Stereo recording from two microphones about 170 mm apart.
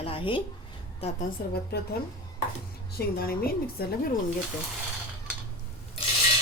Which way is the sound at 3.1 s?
60° left (ahead or behind).